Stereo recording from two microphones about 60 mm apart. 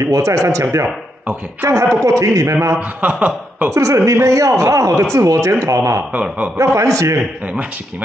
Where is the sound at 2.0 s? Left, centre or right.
Right.